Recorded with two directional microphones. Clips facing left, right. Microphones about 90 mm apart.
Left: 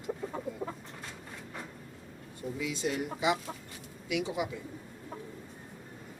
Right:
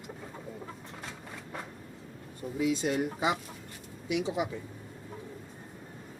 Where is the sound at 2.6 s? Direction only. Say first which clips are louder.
Right 6 dB; 45° right (ahead or behind); by 4.3 s 30° right (ahead or behind).